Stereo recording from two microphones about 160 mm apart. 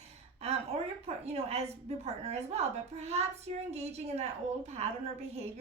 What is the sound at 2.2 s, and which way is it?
A woman's voice, 40° right (ahead or behind).